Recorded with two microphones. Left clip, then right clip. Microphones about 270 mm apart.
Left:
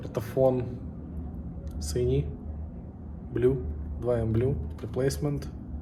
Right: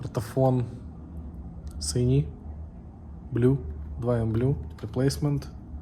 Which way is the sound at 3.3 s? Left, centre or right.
Right.